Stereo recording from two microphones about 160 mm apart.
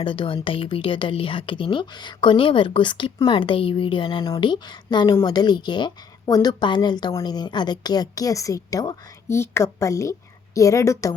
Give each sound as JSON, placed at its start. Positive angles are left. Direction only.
{"t": 0.0, "sound": "a woman's voice", "side_deg": 30}